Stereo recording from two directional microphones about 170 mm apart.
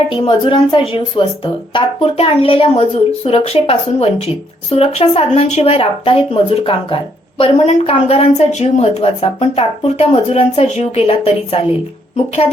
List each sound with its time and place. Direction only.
0.1 s speech: 30° left (ahead or behind)